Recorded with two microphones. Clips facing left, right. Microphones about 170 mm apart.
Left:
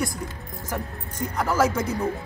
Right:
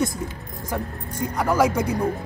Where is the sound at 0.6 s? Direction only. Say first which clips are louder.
Right 3 dB; 15° right (ahead or behind).